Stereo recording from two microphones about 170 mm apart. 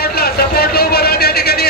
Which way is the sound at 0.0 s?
65° left (ahead or behind).